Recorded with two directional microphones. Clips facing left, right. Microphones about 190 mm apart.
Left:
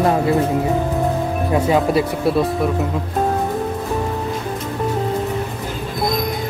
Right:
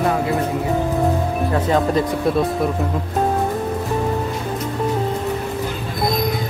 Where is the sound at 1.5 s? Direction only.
10° left (ahead or behind).